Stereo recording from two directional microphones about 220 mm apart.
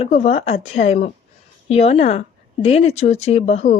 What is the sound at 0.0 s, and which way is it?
A woman's voice, 30° left (ahead or behind).